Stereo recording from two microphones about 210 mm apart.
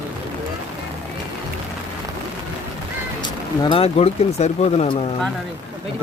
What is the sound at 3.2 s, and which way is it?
Speech, 20° left (ahead or behind).